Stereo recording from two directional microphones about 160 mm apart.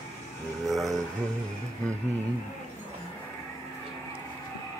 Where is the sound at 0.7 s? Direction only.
Centre (ahead or behind).